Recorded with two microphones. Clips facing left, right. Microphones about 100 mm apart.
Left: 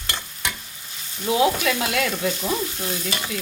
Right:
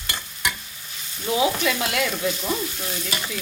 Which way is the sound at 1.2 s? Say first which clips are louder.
Left 2 dB; centre (ahead or behind).